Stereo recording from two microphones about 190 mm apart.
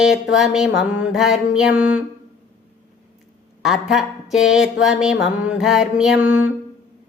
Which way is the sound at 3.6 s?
Centre (ahead or behind).